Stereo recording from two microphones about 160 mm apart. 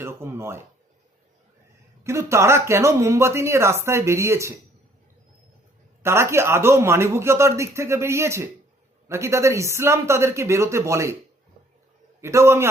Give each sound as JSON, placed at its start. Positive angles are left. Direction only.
{"t": 0.0, "sound": "a sound", "side_deg": -15}
{"t": 2.0, "sound": "speech", "side_deg": -15}
{"t": 6.0, "sound": "speech", "side_deg": -15}
{"t": 12.2, "sound": "speech", "side_deg": -15}